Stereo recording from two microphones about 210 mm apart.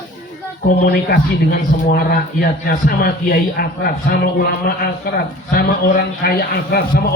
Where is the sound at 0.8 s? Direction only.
45° left (ahead or behind).